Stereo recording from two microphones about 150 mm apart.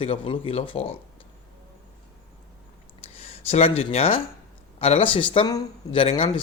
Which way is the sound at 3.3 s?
45° left (ahead or behind).